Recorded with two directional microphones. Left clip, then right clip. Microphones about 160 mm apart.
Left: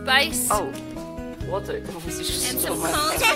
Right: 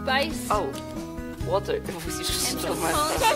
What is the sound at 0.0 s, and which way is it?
Speech, 20° right (ahead or behind).